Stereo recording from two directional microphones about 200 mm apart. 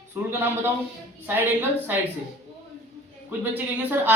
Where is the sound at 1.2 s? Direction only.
10° right (ahead or behind).